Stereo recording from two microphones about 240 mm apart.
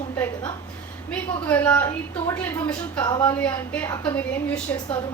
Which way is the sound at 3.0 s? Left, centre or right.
Centre.